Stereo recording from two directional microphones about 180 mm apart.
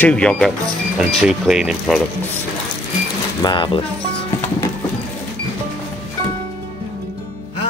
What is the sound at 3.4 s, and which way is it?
Speech, 25° left (ahead or behind).